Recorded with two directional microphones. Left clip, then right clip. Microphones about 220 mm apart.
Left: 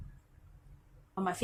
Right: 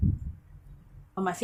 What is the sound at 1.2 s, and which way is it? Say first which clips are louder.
Speech: right 4 dB; 15° right (ahead or behind).